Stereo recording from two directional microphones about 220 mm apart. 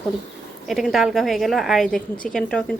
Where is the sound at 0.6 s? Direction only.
Centre (ahead or behind).